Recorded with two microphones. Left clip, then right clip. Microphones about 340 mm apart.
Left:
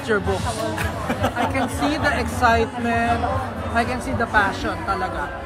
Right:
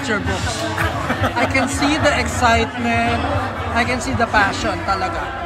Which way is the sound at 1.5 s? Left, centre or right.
Centre.